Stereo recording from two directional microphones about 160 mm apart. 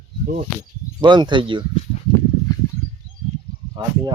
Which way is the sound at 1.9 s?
45° left (ahead or behind).